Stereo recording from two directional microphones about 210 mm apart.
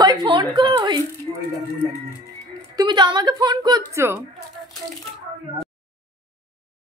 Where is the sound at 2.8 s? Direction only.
20° right (ahead or behind).